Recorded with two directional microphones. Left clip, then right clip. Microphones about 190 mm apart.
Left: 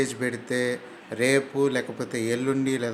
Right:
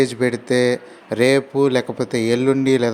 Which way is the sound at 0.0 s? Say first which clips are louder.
Right 9 dB; 30° right (ahead or behind).